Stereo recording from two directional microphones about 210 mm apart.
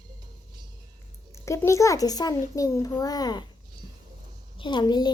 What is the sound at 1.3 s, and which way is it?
A child's voice, 15° left (ahead or behind).